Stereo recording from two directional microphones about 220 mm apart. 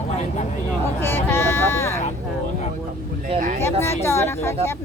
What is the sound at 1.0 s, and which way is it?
Speech, 10° left (ahead or behind).